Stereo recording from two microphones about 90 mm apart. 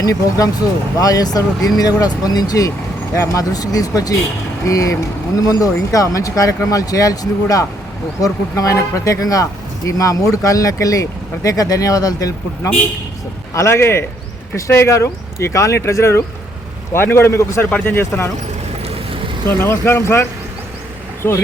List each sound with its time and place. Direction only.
0.0 s speech: 40° left (ahead or behind); by 18.3 s 25° left (ahead or behind)
19.5 s speech: 30° left (ahead or behind)
21.2 s speech: 25° left (ahead or behind)